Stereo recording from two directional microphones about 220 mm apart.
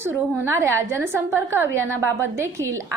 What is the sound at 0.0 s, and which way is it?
A woman's voice, 10° right (ahead or behind).